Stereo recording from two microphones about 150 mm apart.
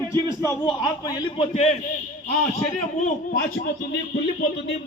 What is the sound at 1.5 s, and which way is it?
Speech, 45° left (ahead or behind).